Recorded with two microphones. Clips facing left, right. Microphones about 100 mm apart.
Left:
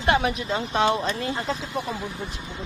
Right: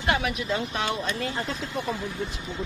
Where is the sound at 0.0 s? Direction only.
30° left (ahead or behind).